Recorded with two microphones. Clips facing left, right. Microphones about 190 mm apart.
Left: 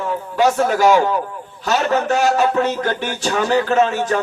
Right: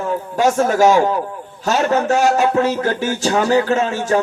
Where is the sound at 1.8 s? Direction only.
30° right (ahead or behind).